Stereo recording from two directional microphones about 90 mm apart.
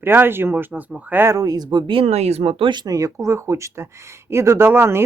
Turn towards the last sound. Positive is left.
turn(degrees=-25)  # may be behind; listen again after turning